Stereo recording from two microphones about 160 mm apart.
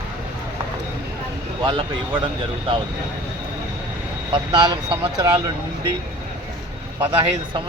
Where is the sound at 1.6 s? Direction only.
25° right (ahead or behind).